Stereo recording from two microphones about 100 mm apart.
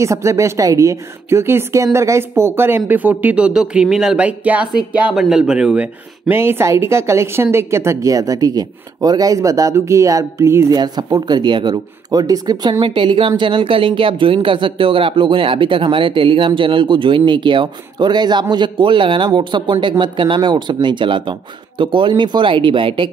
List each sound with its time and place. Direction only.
0.0 s speech: 30° right (ahead or behind); by 6.3 s 10° right (ahead or behind)
6.3 s speech: 25° right (ahead or behind)
10.7 s speech: 45° right (ahead or behind)
12.8 s speech: 55° right (ahead or behind)